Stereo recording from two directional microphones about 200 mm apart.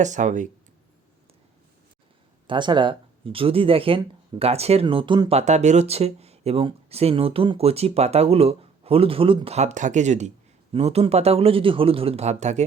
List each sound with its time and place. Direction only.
0.0 s speech: 35° right (ahead or behind)
2.5 s speech: 25° right (ahead or behind)